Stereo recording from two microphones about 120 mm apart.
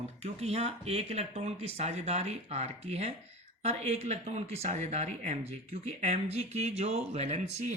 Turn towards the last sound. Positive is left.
turn(degrees=-70)  # may be behind; listen again after turning